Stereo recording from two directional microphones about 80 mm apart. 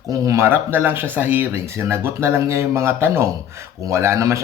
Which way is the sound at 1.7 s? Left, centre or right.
Right.